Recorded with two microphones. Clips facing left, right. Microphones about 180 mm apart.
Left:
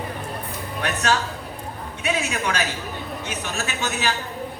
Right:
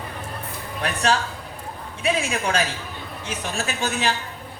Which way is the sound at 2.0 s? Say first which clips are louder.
Right 2 dB; 30° right (ahead or behind).